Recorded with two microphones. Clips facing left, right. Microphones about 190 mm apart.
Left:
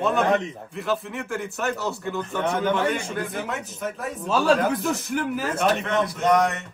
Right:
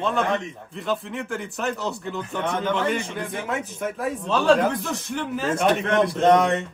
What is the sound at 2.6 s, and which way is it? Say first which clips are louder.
Speech: left 1 dB; 15° left (ahead or behind).